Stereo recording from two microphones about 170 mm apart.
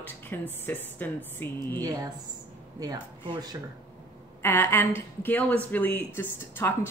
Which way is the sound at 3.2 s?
25° right (ahead or behind).